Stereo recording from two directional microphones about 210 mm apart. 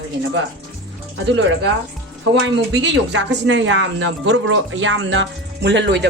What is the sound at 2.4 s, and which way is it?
Speech, 55° right (ahead or behind).